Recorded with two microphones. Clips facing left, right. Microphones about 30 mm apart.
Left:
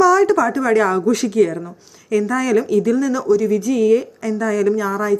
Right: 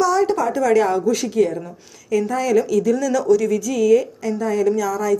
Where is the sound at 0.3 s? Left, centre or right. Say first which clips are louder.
Left 4 dB; left.